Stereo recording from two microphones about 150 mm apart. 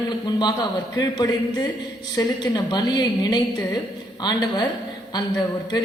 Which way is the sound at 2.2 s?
25° left (ahead or behind).